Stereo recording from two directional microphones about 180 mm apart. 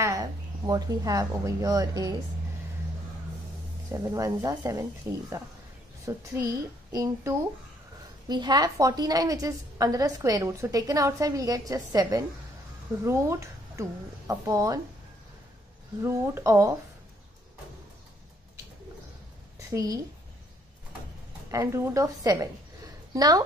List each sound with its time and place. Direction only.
0.0 s speech: 20° right (ahead or behind)
4.0 s a woman's voice: 20° right (ahead or behind)
16.0 s a woman's voice: 15° right (ahead or behind)
19.7 s a woman's voice: 20° right (ahead or behind)
21.5 s a woman's voice: 15° right (ahead or behind)